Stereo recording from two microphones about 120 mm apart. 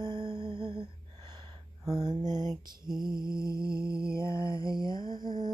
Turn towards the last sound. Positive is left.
turn(degrees=-40)  # may be behind; listen again after turning